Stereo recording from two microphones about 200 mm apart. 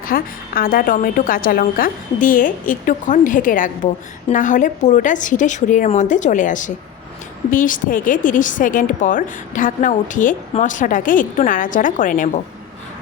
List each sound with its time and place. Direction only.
0.1 s a woman's voice: 45° left (ahead or behind)